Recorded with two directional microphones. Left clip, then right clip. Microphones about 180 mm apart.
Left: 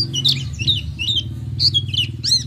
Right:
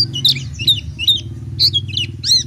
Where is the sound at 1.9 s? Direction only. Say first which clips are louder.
Right 3 dB; 20° right (ahead or behind).